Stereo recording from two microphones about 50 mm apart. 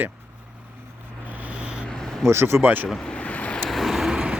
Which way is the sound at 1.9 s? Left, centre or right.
Centre.